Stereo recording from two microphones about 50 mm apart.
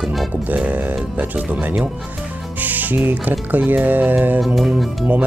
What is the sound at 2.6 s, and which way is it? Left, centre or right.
Music, right.